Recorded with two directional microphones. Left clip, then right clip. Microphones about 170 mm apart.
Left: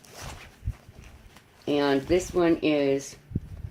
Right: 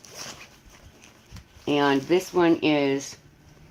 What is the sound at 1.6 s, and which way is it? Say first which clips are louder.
Speech: right 2 dB; 30° right (ahead or behind).